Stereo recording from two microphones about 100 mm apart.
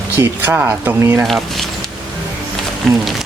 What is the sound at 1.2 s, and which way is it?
Speech, 5° left (ahead or behind).